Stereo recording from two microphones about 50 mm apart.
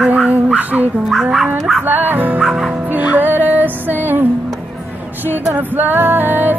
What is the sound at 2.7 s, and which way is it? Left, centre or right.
Music, right.